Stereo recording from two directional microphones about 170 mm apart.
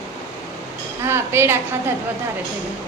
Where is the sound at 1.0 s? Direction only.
15° right (ahead or behind).